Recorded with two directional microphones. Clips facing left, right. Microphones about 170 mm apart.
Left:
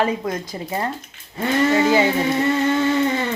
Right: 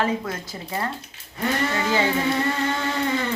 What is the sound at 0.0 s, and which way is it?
Speech, 20° left (ahead or behind).